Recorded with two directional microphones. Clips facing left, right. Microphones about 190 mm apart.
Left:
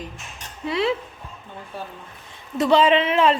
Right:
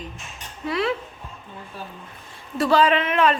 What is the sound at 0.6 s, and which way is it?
Speech, 25° left (ahead or behind).